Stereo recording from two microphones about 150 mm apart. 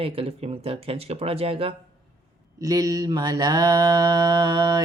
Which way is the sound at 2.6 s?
25° right (ahead or behind).